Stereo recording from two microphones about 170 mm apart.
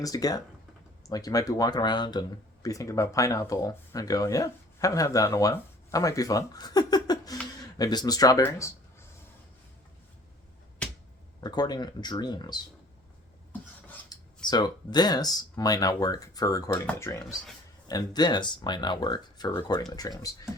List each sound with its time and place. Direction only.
0.0 s speech: 20° left (ahead or behind)
11.3 s speech: 25° left (ahead or behind)
14.1 s speech: 25° left (ahead or behind)